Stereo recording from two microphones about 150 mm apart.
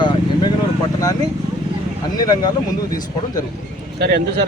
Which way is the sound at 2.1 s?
25° left (ahead or behind).